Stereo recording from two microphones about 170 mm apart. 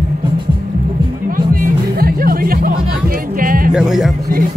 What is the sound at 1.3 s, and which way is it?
Music, 55° right (ahead or behind).